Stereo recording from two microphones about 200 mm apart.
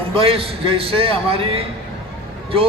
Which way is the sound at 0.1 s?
25° right (ahead or behind).